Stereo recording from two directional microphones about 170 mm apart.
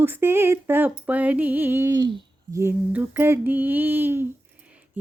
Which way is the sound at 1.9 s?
25° right (ahead or behind).